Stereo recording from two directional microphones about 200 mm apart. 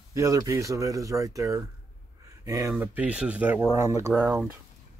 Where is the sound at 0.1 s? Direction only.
15° right (ahead or behind).